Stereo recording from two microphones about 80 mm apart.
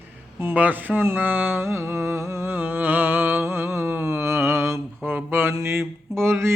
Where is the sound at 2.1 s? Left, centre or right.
Right.